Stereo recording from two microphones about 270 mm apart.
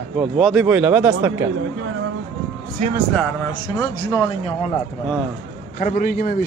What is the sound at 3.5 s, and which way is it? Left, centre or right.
Speech, centre.